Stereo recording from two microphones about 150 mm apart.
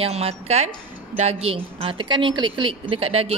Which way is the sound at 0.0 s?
40° right (ahead or behind).